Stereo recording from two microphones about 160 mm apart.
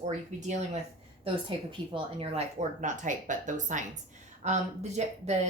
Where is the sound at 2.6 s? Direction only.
50° right (ahead or behind).